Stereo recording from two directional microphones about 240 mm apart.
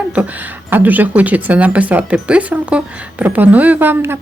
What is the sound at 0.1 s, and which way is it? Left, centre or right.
Speech, centre.